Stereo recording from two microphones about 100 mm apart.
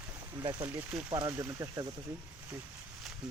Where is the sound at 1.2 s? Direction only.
30° right (ahead or behind).